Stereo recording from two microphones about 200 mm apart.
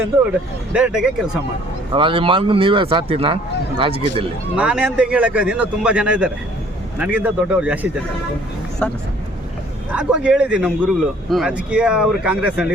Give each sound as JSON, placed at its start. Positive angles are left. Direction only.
{"t": 0.7, "sound": "speech", "side_deg": -5}
{"t": 1.9, "sound": "speech", "side_deg": -25}
{"t": 4.5, "sound": "speech", "side_deg": -5}
{"t": 8.8, "sound": "speech", "side_deg": 5}
{"t": 9.9, "sound": "speech", "side_deg": -5}